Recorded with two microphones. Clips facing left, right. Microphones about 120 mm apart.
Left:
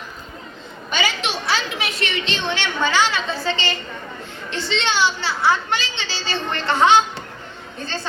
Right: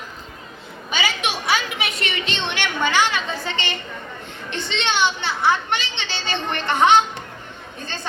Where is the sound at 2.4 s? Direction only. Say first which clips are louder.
Left 1 dB; 15° right (ahead or behind).